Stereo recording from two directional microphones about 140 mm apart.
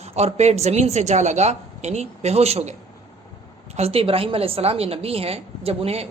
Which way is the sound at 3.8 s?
45° right (ahead or behind).